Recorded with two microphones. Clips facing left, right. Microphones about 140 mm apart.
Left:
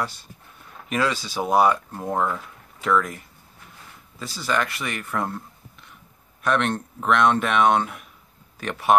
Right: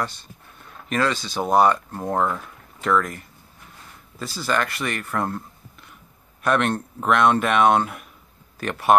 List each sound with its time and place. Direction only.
0.0 s speech: 5° left (ahead or behind)
4.2 s speech: centre (ahead or behind)
6.4 s speech: 5° right (ahead or behind)